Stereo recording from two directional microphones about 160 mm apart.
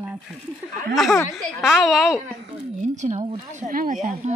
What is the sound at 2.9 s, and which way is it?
Speech, 50° right (ahead or behind).